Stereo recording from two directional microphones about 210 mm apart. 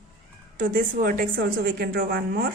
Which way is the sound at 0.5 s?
40° right (ahead or behind).